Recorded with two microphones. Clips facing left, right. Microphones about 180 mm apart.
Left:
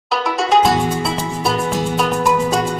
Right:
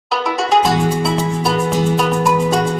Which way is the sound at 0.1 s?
Centre (ahead or behind).